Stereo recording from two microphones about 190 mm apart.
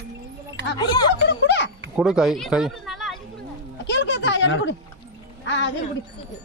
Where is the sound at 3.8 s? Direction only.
65° left (ahead or behind).